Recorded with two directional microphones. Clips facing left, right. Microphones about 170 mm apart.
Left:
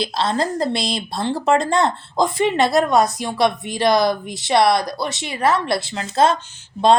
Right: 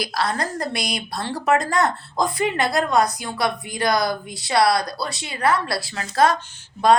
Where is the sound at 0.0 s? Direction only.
25° left (ahead or behind).